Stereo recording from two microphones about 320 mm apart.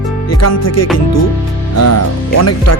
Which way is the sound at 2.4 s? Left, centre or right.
Left.